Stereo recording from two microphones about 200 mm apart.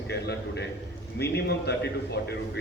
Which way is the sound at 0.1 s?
55° left (ahead or behind).